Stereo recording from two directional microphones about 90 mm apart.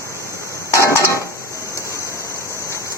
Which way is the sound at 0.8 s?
30° left (ahead or behind).